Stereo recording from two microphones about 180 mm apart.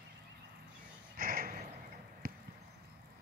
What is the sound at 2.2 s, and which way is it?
Basketball bounce, 55° right (ahead or behind).